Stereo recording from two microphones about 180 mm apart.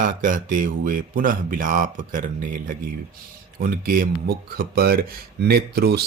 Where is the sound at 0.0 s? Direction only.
45° right (ahead or behind).